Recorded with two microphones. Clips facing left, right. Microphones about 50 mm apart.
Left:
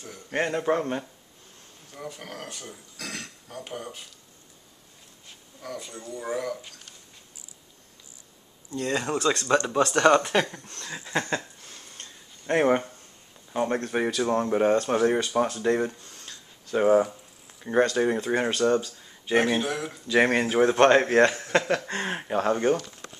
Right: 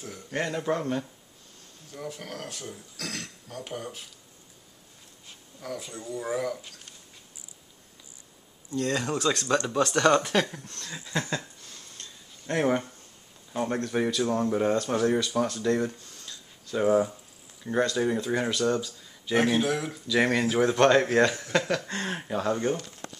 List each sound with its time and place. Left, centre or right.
0.3 s speech: left
1.9 s speech: centre
5.6 s speech: centre
8.7 s speech: centre
10.7 s a sound: left
13.5 s speech: centre
14.1 s speech: left
16.1 s a sound: left
17.6 s speech: left
19.3 s speech: centre
20.1 s speech: left